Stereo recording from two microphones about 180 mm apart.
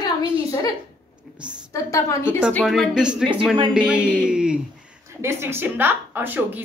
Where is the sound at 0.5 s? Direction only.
20° left (ahead or behind).